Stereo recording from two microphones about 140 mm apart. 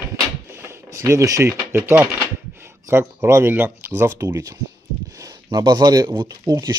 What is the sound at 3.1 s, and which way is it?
Speech, 20° right (ahead or behind).